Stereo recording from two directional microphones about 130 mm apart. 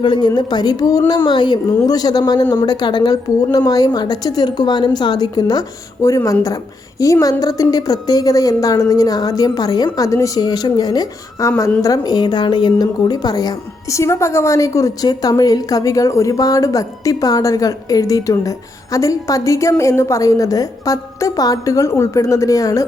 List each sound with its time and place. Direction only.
0.0 s a woman's voice: 35° left (ahead or behind)